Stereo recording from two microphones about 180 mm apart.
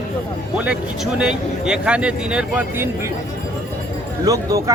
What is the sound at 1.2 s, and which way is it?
A man's voice, 5° right (ahead or behind).